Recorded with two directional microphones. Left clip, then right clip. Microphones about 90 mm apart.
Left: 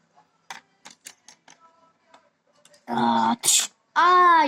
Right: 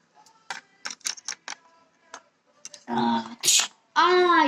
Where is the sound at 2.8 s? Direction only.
35° left (ahead or behind).